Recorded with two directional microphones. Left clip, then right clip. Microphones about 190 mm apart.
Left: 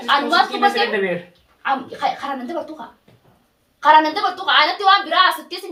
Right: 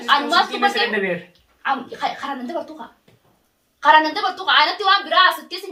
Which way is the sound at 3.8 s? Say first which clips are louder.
Left 1 dB; 15° right (ahead or behind).